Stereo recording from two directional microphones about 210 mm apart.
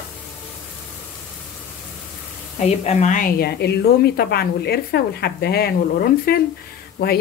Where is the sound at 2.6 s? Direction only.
35° left (ahead or behind).